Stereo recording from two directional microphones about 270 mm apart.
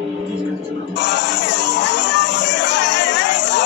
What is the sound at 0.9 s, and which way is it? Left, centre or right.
Music, left.